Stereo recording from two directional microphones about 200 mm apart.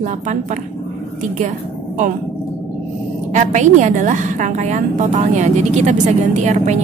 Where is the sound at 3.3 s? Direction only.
35° right (ahead or behind).